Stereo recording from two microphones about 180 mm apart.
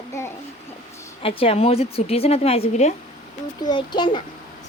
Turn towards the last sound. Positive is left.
turn(degrees=25)  # may be behind; listen again after turning